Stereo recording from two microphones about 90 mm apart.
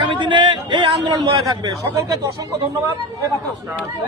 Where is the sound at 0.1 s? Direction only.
65° right (ahead or behind).